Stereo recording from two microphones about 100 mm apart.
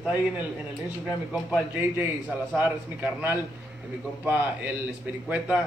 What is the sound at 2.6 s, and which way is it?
A man's voice, 20° right (ahead or behind).